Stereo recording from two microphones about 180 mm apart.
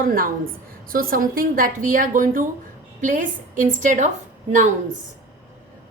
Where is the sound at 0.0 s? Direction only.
50° right (ahead or behind).